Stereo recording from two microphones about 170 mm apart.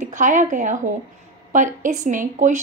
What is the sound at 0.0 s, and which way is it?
A woman's voice, 50° right (ahead or behind).